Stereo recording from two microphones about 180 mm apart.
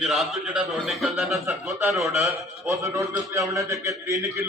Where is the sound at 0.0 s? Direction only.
Centre (ahead or behind).